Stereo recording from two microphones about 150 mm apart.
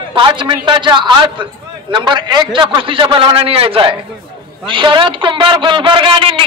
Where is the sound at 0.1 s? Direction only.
30° right (ahead or behind).